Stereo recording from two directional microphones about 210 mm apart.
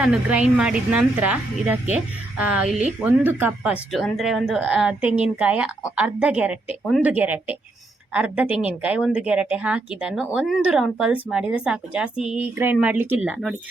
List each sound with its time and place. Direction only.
0.0 s a woman's voice: 5° right (ahead or behind)